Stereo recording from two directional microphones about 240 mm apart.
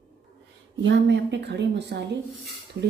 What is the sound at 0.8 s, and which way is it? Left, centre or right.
A woman's voice, right.